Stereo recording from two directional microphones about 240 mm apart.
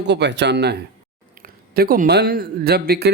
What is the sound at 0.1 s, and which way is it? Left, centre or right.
A man's voice, right.